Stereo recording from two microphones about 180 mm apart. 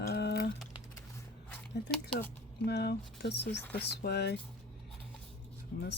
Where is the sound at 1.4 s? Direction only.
5° left (ahead or behind).